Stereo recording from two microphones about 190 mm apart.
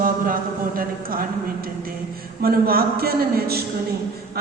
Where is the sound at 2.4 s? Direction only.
50° right (ahead or behind).